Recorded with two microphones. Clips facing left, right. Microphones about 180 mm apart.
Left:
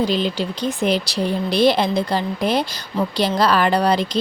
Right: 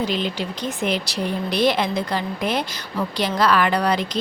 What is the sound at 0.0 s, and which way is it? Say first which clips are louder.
A woman's voice: left 4 dB; 35° left (ahead or behind).